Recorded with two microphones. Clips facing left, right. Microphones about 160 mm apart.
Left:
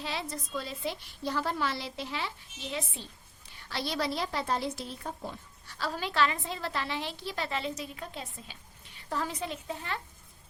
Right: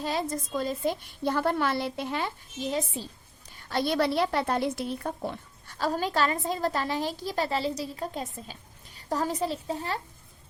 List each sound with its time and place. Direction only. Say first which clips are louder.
0.0 s a woman's voice: right 7 dB; 45° right (ahead or behind); by 5.7 s 60° right (ahead or behind)
5.7 s a woman's voice: right 5 dB; 45° right (ahead or behind)